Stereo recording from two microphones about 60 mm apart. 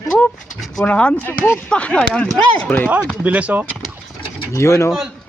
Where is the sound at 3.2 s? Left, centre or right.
Right.